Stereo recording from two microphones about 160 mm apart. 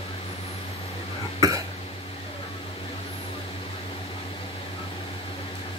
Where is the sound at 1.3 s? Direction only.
20° right (ahead or behind).